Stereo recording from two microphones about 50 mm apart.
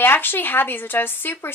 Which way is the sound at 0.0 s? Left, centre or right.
Left.